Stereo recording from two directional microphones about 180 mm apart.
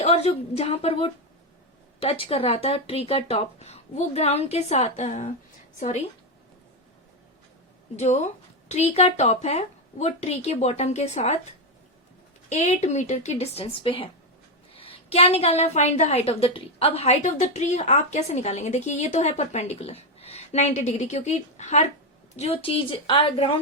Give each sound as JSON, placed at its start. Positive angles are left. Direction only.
{"t": 0.0, "sound": "a woman's voice", "side_deg": 35}
{"t": 7.9, "sound": "a woman's voice", "side_deg": 40}
{"t": 12.5, "sound": "a woman's voice", "side_deg": 40}